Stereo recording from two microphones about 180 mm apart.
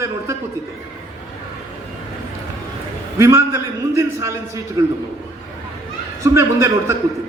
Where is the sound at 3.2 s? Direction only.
15° right (ahead or behind).